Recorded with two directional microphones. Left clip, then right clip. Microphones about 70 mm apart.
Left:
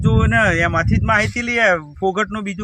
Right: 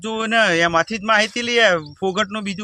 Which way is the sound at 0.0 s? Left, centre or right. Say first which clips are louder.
Left 1 dB; right.